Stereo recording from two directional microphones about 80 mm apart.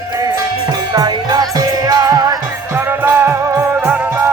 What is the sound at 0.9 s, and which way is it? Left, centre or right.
Music, right.